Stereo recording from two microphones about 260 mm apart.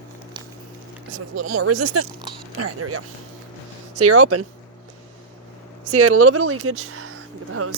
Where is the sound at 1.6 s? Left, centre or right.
Right.